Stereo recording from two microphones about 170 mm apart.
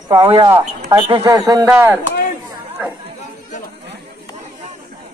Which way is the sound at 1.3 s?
20° right (ahead or behind).